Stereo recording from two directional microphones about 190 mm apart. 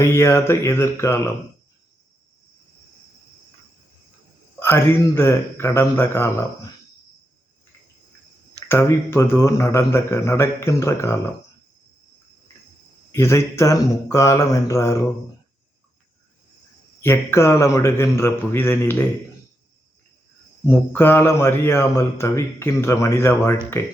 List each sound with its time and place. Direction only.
0.1 s a man's voice: 15° left (ahead or behind)
4.6 s a man's voice: 10° left (ahead or behind)
8.6 s a man's voice: 10° left (ahead or behind)
13.1 s a man's voice: 15° left (ahead or behind)
17.0 s a man's voice: 15° left (ahead or behind)
20.7 s a man's voice: 10° left (ahead or behind)